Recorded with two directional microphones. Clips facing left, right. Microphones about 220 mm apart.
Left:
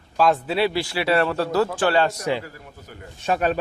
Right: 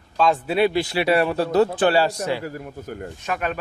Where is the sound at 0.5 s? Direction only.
20° right (ahead or behind).